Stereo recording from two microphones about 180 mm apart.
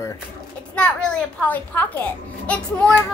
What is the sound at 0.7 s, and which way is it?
A child's voice, 5° left (ahead or behind).